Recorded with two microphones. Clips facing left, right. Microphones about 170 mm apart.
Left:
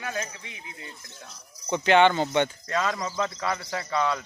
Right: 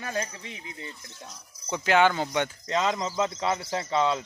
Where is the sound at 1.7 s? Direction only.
5° right (ahead or behind).